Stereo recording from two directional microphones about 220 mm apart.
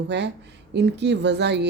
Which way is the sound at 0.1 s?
50° right (ahead or behind).